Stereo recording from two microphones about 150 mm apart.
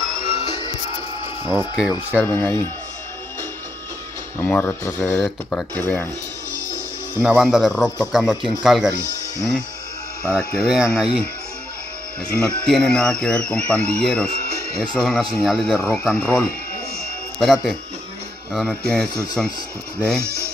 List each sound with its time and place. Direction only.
0.0 s music: 35° left (ahead or behind)
1.8 s speech: 5° right (ahead or behind)
2.1 s speech: 15° left (ahead or behind)
4.4 s speech: 15° left (ahead or behind)
7.2 s speech: centre (ahead or behind)
10.2 s speech: 5° left (ahead or behind)
12.4 s speech: 5° left (ahead or behind)
20.2 s speech: 20° right (ahead or behind)